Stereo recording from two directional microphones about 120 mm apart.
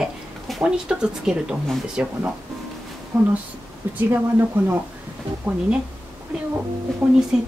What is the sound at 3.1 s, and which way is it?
Speech, 20° right (ahead or behind).